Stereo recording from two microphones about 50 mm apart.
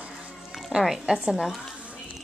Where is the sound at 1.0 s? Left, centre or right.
Centre.